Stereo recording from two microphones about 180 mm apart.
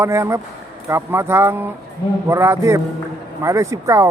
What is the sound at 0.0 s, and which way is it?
A man's voice, 15° right (ahead or behind).